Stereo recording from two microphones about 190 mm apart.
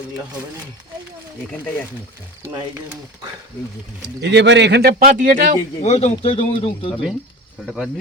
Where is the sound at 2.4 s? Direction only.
25° right (ahead or behind).